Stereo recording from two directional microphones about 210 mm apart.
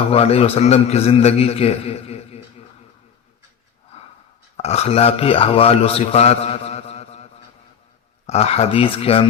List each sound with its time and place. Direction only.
0.1 s a man's voice: 30° left (ahead or behind)
3.9 s a sound: 30° left (ahead or behind)
4.5 s a man's voice: 30° left (ahead or behind)
8.3 s a man's voice: 30° left (ahead or behind)